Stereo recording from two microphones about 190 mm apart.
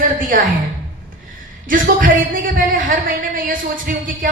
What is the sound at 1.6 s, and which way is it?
A woman's voice, 45° right (ahead or behind).